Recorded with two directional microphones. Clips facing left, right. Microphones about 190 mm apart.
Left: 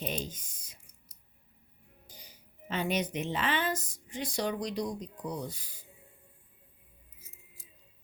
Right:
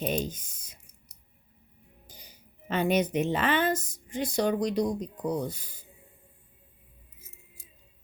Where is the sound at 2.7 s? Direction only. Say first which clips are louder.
Right 6 dB; 50° right (ahead or behind).